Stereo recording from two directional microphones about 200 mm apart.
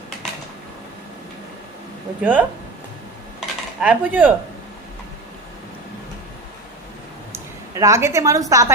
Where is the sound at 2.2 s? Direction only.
10° right (ahead or behind).